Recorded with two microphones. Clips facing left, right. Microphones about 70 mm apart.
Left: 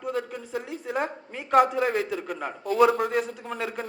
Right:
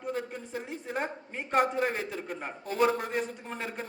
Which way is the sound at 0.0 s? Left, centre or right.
Left.